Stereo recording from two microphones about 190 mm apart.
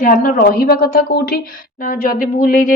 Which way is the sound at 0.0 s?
45° left (ahead or behind).